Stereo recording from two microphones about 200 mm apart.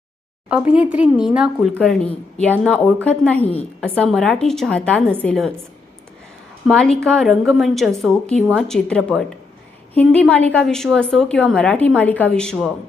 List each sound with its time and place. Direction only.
0.4 s speech: 5° right (ahead or behind)
6.7 s speech: centre (ahead or behind)